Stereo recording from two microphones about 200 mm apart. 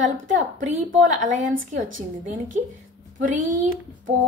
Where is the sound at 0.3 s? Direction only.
40° right (ahead or behind).